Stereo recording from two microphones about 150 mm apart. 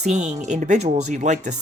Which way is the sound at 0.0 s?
50° right (ahead or behind).